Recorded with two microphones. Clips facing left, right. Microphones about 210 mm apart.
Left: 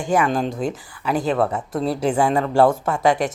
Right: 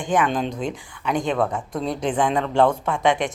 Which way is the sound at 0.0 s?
10° left (ahead or behind).